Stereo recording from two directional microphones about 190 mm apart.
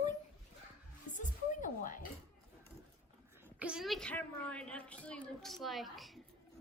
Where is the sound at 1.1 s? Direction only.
40° left (ahead or behind).